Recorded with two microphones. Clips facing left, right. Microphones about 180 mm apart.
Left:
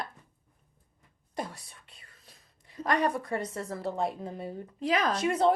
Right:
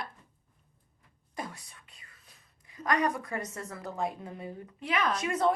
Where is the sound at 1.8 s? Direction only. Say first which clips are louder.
Left 2 dB; 30° left (ahead or behind).